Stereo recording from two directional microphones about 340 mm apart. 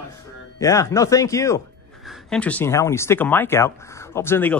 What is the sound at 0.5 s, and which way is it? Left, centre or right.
Speech, centre.